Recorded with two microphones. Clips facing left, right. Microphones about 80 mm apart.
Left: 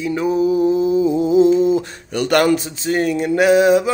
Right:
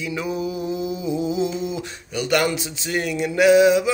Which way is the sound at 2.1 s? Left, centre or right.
Left.